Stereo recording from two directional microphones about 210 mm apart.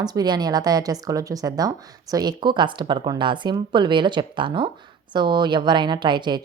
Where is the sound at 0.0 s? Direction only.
20° right (ahead or behind).